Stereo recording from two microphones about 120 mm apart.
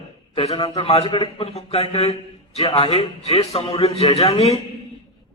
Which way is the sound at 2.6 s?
40° left (ahead or behind).